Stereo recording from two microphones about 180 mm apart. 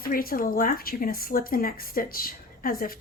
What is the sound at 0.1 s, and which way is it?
Speech, 55° left (ahead or behind).